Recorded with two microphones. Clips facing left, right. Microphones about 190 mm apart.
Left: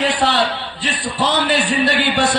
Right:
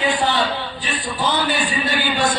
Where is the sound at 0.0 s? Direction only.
80° left.